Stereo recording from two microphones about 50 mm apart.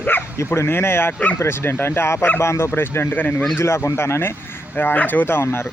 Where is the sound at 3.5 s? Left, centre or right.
Left.